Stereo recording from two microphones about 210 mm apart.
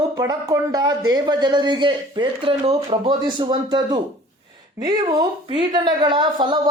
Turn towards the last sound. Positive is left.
turn(degrees=-20)  # may be behind; listen again after turning